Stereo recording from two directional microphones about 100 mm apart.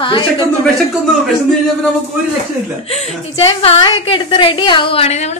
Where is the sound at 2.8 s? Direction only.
90° left.